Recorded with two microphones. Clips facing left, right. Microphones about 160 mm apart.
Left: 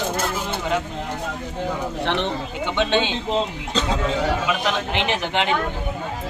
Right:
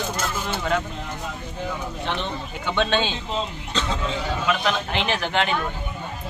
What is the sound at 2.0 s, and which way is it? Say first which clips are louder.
Speech: left 5 dB; 70° left (ahead or behind).